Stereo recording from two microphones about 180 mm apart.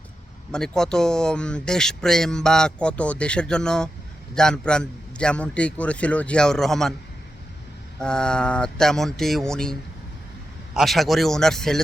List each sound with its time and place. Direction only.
0.5 s speech: 5° left (ahead or behind)
8.0 s speech: 5° left (ahead or behind)
10.8 s speech: centre (ahead or behind)